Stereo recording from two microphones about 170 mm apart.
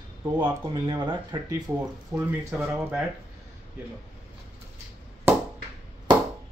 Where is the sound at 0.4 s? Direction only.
25° right (ahead or behind).